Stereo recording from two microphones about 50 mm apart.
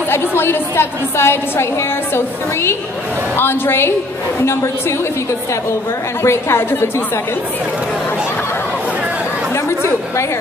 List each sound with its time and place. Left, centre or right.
0.1 s a woman's voice: left
3.3 s a woman's voice: left
6.2 s a woman's voice: left
9.7 s chatter: left